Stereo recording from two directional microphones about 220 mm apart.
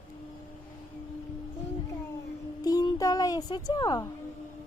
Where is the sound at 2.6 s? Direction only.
15° left (ahead or behind).